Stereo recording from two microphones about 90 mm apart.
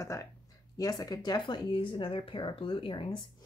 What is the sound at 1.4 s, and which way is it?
Speech, 70° left (ahead or behind).